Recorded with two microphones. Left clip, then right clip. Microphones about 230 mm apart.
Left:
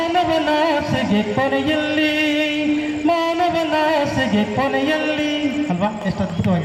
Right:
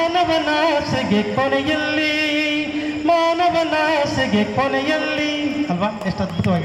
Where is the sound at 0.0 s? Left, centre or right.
Right.